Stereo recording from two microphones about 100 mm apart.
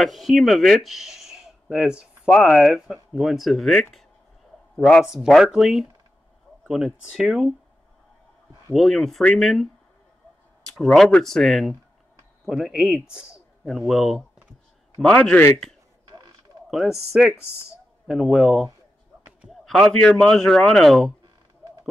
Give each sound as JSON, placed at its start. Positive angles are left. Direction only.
{"t": 0.0, "sound": "a man's voice", "side_deg": 0}
{"t": 5.0, "sound": "a man's voice", "side_deg": -5}
{"t": 8.7, "sound": "a man's voice", "side_deg": 0}
{"t": 10.8, "sound": "a man's voice", "side_deg": 0}
{"t": 15.1, "sound": "a man's voice", "side_deg": 15}
{"t": 16.7, "sound": "a man's voice", "side_deg": -5}